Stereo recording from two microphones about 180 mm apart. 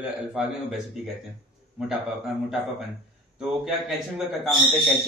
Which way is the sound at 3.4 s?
Centre (ahead or behind).